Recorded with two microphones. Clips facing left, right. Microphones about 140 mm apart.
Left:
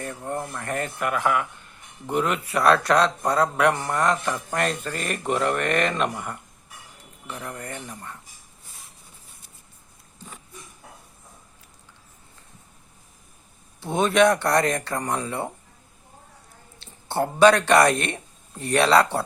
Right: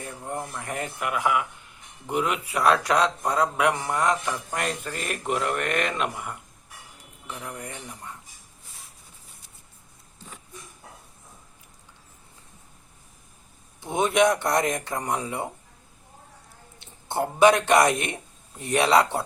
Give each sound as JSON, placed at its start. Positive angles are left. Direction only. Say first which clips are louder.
{"t": 0.3, "sound": "speech", "louder": "left 2 dB", "side_deg": -15}
{"t": 7.3, "sound": "speech", "louder": "left 2 dB", "side_deg": -10}
{"t": 13.8, "sound": "speech", "louder": "left 2 dB", "side_deg": -15}
{"t": 16.8, "sound": "speech", "louder": "left 2 dB", "side_deg": -20}